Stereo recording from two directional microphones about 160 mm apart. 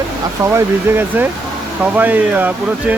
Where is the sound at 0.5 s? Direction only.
15° right (ahead or behind).